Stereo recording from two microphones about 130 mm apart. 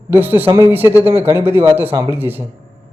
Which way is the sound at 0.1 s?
15° right (ahead or behind).